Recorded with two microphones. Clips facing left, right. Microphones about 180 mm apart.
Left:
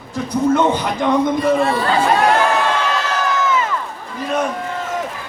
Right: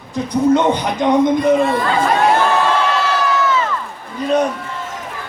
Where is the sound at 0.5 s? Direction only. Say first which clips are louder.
Right 1 dB; 20° right (ahead or behind).